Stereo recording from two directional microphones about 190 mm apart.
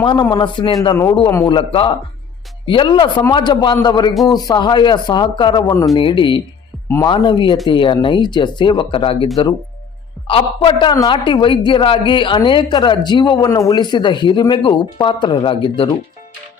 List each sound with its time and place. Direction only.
0.0 s a woman's voice: 25° left (ahead or behind)